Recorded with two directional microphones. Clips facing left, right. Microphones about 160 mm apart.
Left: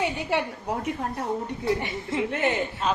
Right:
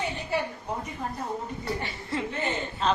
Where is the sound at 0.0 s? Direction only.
80° left.